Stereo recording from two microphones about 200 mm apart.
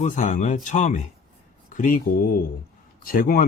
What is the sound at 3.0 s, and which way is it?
Speech, 45° left (ahead or behind).